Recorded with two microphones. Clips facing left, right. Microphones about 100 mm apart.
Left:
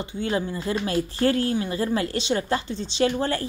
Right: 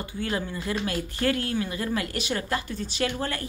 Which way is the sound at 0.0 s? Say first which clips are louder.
Left 4 dB; 25° left (ahead or behind).